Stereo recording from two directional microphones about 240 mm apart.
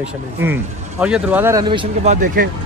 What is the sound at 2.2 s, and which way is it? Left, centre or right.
Speech, right.